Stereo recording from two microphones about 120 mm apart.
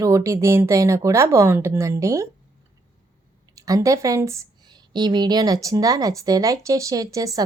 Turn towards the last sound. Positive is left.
turn(degrees=-30)  # may be behind; listen again after turning